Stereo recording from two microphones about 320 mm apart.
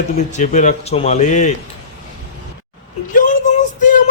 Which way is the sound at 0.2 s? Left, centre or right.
Left.